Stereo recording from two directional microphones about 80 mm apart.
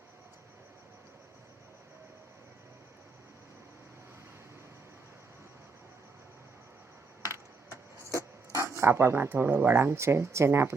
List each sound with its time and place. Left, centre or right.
8.1 s speech: right